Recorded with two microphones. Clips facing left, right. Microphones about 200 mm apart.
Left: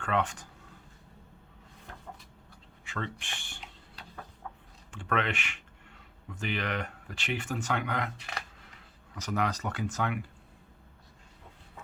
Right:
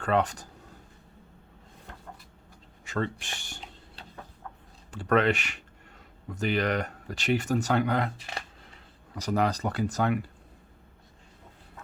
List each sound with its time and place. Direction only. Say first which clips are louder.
0.0 s speech: right 5 dB; 40° right (ahead or behind)
2.8 s a sound: right 7 dB; 40° right (ahead or behind)
4.9 s speech: right 8 dB; 40° right (ahead or behind)